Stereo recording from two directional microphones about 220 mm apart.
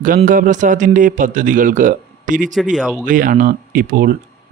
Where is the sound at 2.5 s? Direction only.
Centre (ahead or behind).